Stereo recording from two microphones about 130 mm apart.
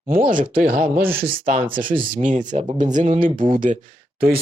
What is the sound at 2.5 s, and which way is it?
Speech, 70° right (ahead or behind).